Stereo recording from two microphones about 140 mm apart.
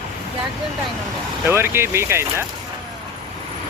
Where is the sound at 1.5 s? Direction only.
15° right (ahead or behind).